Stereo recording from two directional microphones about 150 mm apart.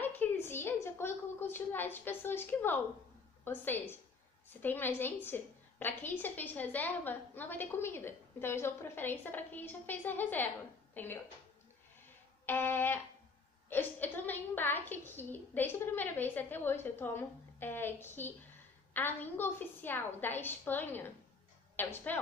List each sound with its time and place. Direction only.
0.0 s a woman's voice: 10° left (ahead or behind)
12.4 s a woman's voice: 15° left (ahead or behind)